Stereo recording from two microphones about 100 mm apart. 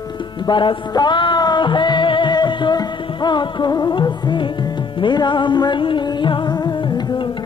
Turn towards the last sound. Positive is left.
turn(degrees=45)  # may be behind; listen again after turning